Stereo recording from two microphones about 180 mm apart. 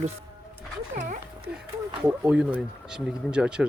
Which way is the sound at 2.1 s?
5° right (ahead or behind).